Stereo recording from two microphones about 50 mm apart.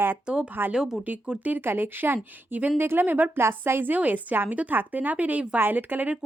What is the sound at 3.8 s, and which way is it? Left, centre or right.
A woman's voice, right.